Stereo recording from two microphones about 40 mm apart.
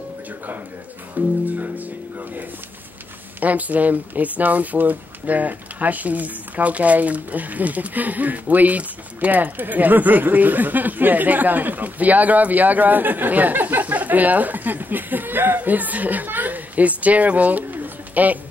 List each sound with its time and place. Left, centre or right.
1.1 s music: right
3.3 s a child's voice: right
17.7 s a sound: right